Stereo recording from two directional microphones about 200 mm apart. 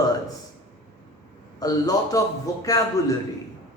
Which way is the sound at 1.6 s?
20° left (ahead or behind).